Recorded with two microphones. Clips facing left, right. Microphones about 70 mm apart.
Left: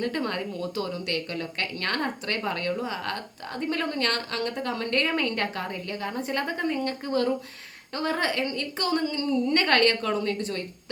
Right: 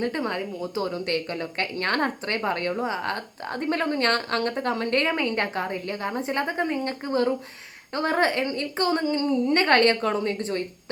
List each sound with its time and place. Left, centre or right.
0.0 s a woman's voice: centre